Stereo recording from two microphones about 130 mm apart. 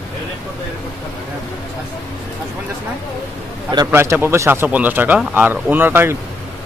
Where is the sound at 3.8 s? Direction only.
15° right (ahead or behind).